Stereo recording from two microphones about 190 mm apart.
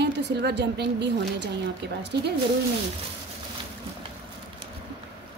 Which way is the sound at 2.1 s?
65° right (ahead or behind).